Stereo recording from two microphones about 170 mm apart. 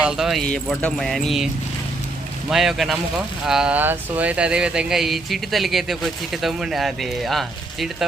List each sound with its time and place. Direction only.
0.0 s speech: 5° right (ahead or behind)
2.5 s speech: centre (ahead or behind)